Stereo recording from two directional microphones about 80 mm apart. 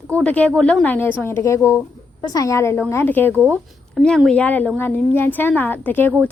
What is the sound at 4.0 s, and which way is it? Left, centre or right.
Speech, centre.